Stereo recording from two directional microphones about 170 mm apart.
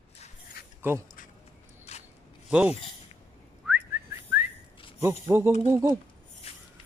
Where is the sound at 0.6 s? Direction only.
65° left (ahead or behind).